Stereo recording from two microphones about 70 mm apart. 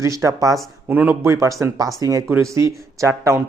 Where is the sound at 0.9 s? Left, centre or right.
Right.